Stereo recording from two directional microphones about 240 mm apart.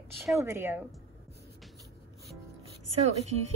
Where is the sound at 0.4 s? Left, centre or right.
Centre.